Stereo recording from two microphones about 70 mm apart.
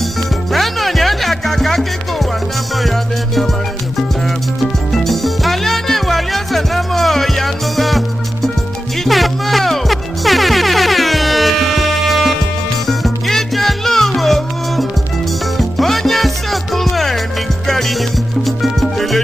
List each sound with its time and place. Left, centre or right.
0.5 s music: centre
4.9 s music: centre